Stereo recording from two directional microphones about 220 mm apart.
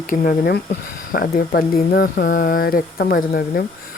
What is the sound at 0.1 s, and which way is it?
Speech, 40° left (ahead or behind).